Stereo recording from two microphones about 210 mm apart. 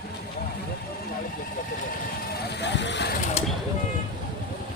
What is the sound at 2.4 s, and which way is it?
Speech, 55° left (ahead or behind).